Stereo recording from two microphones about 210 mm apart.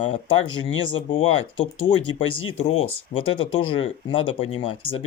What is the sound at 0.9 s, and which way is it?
Speech, 25° left (ahead or behind).